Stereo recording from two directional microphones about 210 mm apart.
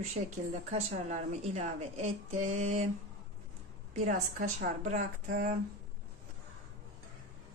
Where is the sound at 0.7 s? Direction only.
30° right (ahead or behind).